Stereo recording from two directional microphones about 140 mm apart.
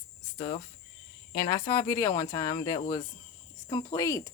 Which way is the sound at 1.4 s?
25° left (ahead or behind).